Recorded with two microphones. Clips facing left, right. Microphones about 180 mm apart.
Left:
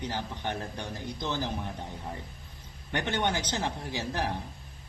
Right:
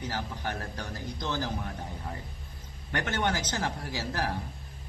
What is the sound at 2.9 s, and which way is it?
A man's voice, 15° left (ahead or behind).